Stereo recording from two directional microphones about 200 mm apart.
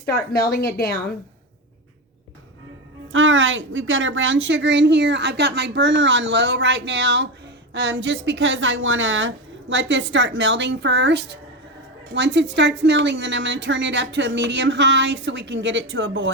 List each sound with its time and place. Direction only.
0.1 s speech: 50° left (ahead or behind)
3.1 s a woman's voice: 75° right (ahead or behind)